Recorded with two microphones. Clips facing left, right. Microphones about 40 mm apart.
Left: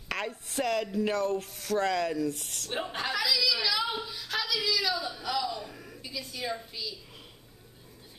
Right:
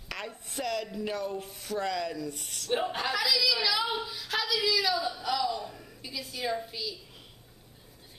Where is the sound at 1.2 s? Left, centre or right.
Centre.